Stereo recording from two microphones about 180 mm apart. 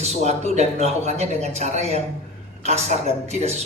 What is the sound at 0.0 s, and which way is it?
Speech, 40° right (ahead or behind).